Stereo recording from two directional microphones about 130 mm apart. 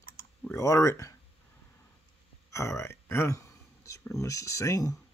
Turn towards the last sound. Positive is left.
turn(degrees=25)  # may be behind; listen again after turning